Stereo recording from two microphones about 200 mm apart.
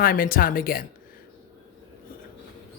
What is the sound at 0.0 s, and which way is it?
Speech, 45° left (ahead or behind).